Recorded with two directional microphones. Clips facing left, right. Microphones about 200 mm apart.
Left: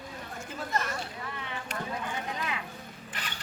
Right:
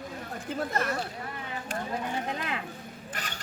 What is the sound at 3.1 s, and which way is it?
Mechanisms, 45° right (ahead or behind).